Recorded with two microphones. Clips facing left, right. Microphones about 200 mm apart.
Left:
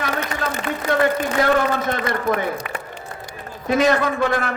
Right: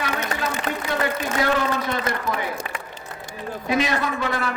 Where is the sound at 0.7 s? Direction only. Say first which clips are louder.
Left 1 dB; 40° right (ahead or behind).